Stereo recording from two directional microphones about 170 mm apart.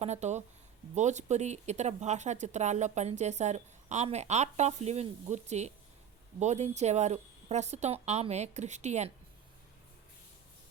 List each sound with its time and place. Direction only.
0.0 s speech: 40° right (ahead or behind)